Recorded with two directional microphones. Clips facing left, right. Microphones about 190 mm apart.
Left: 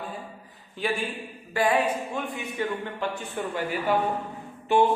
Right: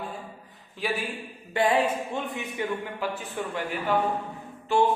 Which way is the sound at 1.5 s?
25° right (ahead or behind).